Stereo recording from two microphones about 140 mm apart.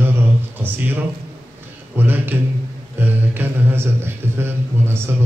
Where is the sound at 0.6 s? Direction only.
15° right (ahead or behind).